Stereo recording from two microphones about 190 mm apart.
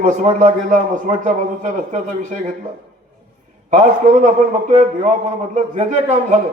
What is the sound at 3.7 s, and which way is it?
A man's voice, 40° right (ahead or behind).